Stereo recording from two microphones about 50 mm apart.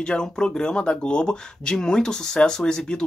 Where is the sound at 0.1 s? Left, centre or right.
Centre.